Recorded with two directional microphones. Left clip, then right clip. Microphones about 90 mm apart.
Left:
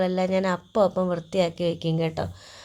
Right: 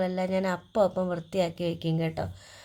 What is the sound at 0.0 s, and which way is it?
Speech, 25° left (ahead or behind).